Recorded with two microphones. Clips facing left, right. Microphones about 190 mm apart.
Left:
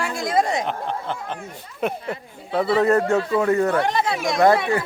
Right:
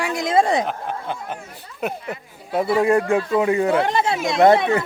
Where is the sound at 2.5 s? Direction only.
10° right (ahead or behind).